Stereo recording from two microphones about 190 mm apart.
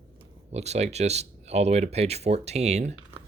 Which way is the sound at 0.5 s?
35° right (ahead or behind).